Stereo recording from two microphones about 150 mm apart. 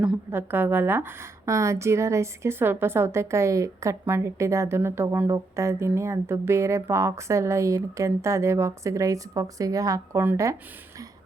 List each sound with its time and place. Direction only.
0.3 s a woman's voice: 15° right (ahead or behind)